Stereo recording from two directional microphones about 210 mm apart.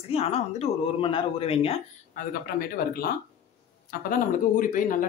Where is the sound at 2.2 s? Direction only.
45° left (ahead or behind).